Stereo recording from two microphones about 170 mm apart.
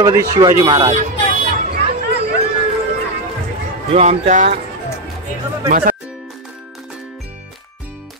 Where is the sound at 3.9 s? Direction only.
45° right (ahead or behind).